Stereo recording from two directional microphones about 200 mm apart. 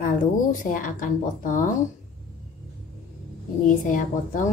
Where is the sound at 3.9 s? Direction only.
40° left (ahead or behind).